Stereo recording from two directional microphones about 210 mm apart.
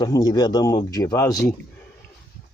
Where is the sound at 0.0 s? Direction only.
20° left (ahead or behind).